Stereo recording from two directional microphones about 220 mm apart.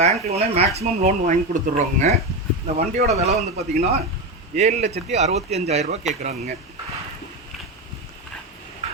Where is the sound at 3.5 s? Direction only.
30° right (ahead or behind).